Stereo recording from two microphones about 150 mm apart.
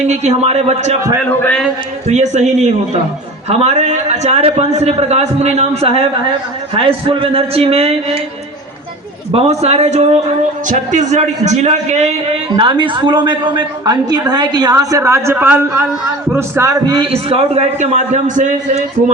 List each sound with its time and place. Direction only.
0.1 s a man's voice: 50° right (ahead or behind)
1.3 s a man's voice: 15° left (ahead or behind)
2.0 s a man's voice: 50° right (ahead or behind)
9.3 s a man's voice: 45° right (ahead or behind)
12.5 s a woman's voice: 35° right (ahead or behind)
17.1 s a man's voice: 40° right (ahead or behind)